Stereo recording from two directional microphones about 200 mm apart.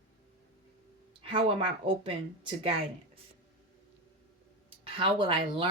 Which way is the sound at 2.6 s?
30° right (ahead or behind).